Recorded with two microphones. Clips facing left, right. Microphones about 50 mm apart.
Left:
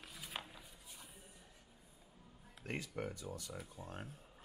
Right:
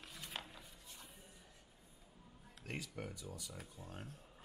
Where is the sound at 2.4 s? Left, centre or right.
Centre.